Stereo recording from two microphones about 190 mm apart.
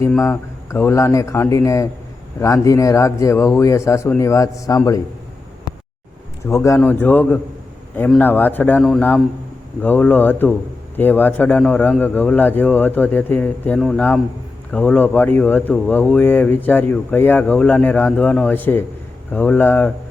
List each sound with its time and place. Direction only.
0.2 s speech: 15° left (ahead or behind)
6.4 s speech: 15° left (ahead or behind)